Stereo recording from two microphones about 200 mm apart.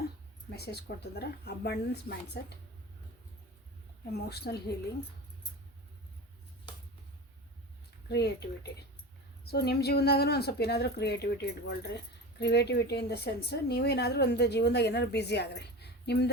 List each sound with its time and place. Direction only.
0.5 s a woman's voice: 55° left (ahead or behind)
4.1 s a woman's voice: 55° left (ahead or behind)
8.1 s a woman's voice: 55° left (ahead or behind)